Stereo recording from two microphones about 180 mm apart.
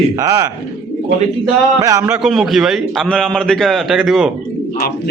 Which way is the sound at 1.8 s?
15° right (ahead or behind).